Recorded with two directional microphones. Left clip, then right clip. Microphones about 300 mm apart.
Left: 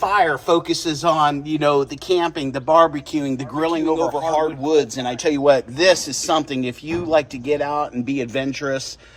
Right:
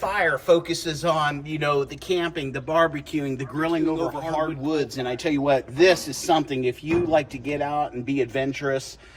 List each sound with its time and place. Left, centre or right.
0.0 s a man's voice: centre; by 8.8 s left